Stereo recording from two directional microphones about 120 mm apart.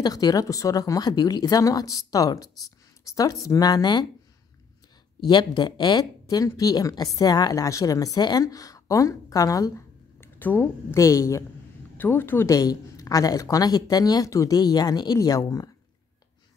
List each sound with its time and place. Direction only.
0.0 s a woman's voice: 30° left (ahead or behind)
5.2 s a woman's voice: 35° left (ahead or behind)
10.2 s a woman's voice: 15° left (ahead or behind)
12.5 s speech: 30° left (ahead or behind)